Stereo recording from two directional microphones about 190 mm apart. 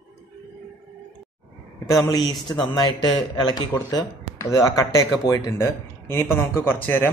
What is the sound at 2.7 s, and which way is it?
A man's voice, 25° left (ahead or behind).